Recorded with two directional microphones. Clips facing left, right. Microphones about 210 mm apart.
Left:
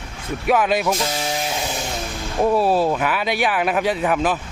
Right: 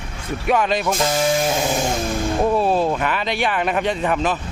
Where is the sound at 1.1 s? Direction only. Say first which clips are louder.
Right 6 dB; 50° right (ahead or behind).